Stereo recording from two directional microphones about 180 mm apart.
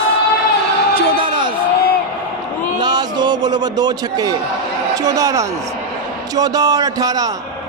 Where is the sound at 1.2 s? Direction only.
25° right (ahead or behind).